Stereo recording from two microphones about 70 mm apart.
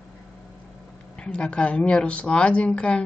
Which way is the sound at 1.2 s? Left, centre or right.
Centre.